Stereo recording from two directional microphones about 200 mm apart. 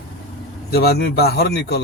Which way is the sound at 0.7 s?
55° left (ahead or behind).